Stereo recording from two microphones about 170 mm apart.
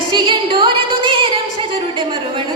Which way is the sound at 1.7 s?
30° right (ahead or behind).